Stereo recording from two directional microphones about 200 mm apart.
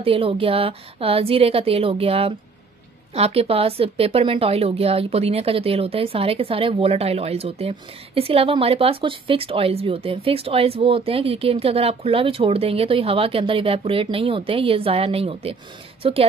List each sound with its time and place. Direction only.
0.0 s a woman's voice: 30° right (ahead or behind)